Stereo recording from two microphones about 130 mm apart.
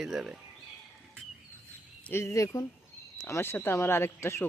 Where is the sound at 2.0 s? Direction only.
20° left (ahead or behind).